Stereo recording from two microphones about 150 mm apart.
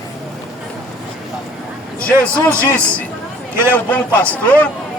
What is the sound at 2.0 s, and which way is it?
A man's voice, 10° left (ahead or behind).